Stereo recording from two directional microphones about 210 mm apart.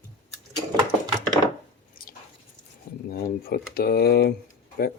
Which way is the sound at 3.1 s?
45° left (ahead or behind).